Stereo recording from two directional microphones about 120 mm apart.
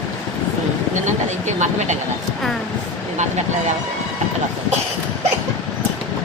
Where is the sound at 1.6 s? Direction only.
75° right (ahead or behind).